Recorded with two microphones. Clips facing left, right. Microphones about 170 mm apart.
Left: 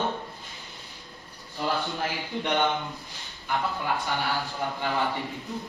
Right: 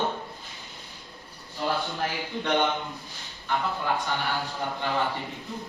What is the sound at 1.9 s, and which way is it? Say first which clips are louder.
Speech: even; 20° left (ahead or behind).